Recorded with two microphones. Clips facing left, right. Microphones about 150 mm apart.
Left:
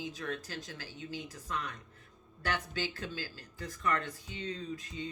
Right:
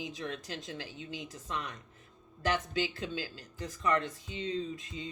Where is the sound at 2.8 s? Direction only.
25° right (ahead or behind).